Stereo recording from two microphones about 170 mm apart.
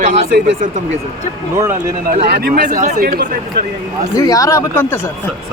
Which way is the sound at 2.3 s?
70° right (ahead or behind).